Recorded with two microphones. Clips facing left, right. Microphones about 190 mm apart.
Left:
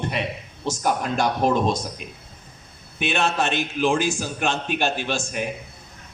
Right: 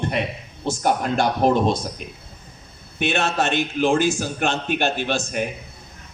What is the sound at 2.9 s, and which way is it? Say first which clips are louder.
A man's voice: right 1 dB; 55° right (ahead or behind).